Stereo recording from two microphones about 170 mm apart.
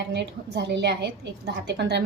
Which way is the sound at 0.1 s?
85° right.